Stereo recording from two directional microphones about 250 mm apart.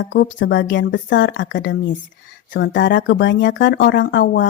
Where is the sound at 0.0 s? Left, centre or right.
Left.